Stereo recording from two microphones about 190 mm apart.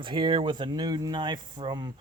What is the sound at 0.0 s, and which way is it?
Speech, 25° right (ahead or behind).